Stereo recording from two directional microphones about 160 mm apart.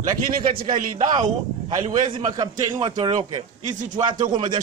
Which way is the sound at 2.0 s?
30° right (ahead or behind).